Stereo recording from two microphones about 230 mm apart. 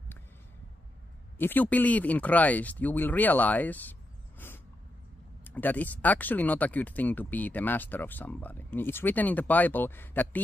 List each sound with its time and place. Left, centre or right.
1.4 s speech: centre
5.4 s speech: centre